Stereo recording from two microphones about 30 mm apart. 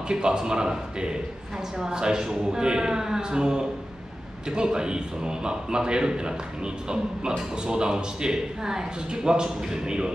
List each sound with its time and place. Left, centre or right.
0.1 s a man's voice: right